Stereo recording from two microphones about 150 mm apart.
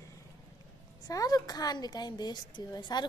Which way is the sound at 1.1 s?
25° left (ahead or behind).